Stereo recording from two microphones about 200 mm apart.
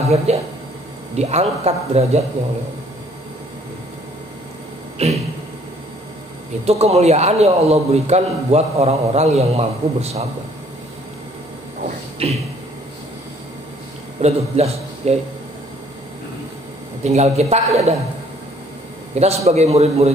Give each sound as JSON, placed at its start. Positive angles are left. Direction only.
{"t": 0.3, "sound": "a man's voice", "side_deg": -35}
{"t": 5.0, "sound": "a man's voice", "side_deg": -30}
{"t": 6.6, "sound": "a man's voice", "side_deg": -30}
{"t": 12.2, "sound": "a man's voice", "side_deg": -30}
{"t": 14.2, "sound": "a man's voice", "side_deg": -30}
{"t": 17.0, "sound": "a man's voice", "side_deg": -35}
{"t": 19.1, "sound": "a man's voice", "side_deg": -30}